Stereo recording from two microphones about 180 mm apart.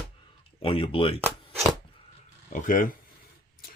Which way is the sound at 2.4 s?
45° left (ahead or behind).